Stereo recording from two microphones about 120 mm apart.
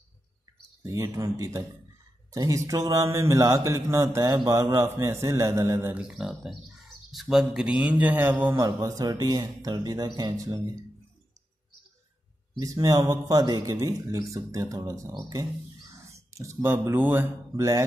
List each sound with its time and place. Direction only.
0.8 s a man's voice: 25° right (ahead or behind)
2.3 s a man's voice: 25° right (ahead or behind)
5.9 s a man's voice: 5° right (ahead or behind)
8.5 s speech: 25° right (ahead or behind)
12.5 s a man's voice: 30° right (ahead or behind)